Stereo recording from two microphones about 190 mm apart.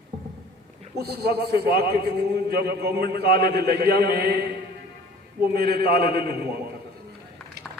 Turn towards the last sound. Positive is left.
turn(degrees=-55)  # may be behind; listen again after turning